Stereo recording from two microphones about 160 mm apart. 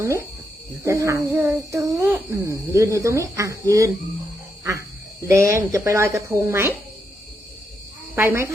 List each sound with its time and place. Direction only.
0.0 s speech: 15° right (ahead or behind)
5.3 s speech: 15° right (ahead or behind)
8.1 s speech: 15° right (ahead or behind)